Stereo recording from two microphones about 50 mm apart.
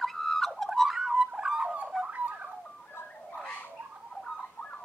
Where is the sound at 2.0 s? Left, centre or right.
Right.